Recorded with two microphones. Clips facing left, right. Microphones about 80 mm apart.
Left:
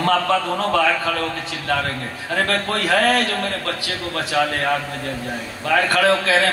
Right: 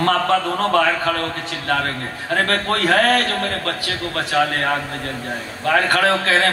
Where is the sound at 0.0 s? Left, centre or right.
Right.